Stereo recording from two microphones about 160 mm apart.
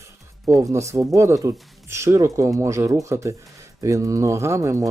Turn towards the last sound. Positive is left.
turn(degrees=-20)  # may be behind; listen again after turning